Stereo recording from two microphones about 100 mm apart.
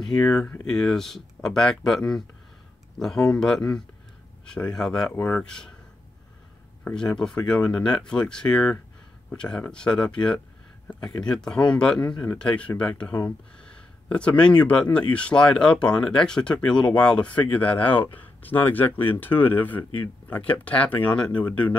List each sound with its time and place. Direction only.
0.2 s speech: 10° left (ahead or behind)
6.8 s speech: 10° left (ahead or behind)
13.1 s a sound: 15° left (ahead or behind)
14.6 s speech: 15° left (ahead or behind)